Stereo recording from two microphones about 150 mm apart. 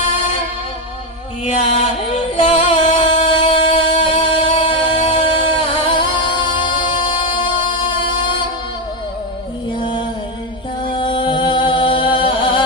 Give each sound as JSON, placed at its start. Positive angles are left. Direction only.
{"t": 1.5, "sound": "music", "side_deg": 45}
{"t": 3.9, "sound": "a sound", "side_deg": 50}
{"t": 4.6, "sound": "music", "side_deg": 35}
{"t": 10.9, "sound": "music", "side_deg": 35}